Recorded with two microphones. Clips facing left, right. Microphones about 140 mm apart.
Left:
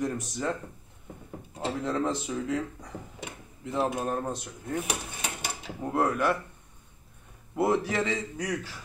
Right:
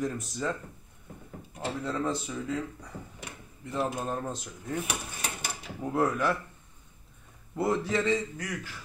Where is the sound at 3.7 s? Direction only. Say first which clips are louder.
Left 3 dB; 25° left (ahead or behind).